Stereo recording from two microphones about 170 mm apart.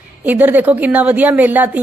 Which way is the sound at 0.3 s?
10° right (ahead or behind).